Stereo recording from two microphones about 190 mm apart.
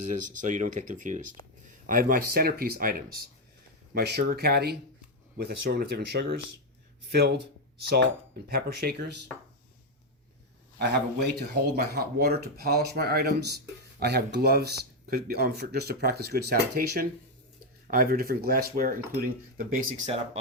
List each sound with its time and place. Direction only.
0.1 s speech: 40° right (ahead or behind); by 7.3 s 60° right (ahead or behind)
8.4 s speech: 55° right (ahead or behind)
10.8 s speech: 60° right (ahead or behind); by 20.4 s 35° right (ahead or behind)